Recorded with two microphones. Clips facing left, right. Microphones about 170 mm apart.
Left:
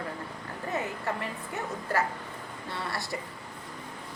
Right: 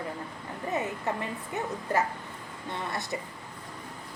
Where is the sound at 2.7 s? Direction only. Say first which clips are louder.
Right 1 dB; 20° right (ahead or behind).